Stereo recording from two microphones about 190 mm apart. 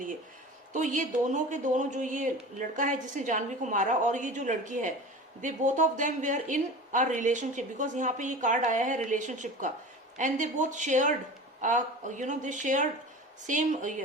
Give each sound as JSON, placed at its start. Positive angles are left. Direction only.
{"t": 0.7, "sound": "speech", "side_deg": -40}